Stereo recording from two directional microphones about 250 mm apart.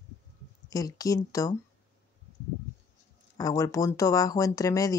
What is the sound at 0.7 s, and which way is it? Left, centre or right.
Speech, centre.